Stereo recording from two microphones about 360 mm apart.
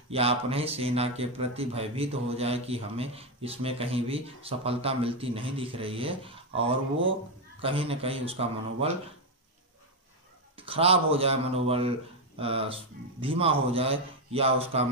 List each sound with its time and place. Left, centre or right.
0.1 s speech: centre
10.5 s speech: centre